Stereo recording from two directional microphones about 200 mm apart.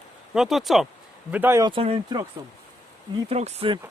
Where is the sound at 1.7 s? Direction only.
30° right (ahead or behind).